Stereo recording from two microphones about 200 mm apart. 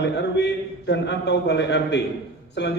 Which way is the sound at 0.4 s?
60° left (ahead or behind).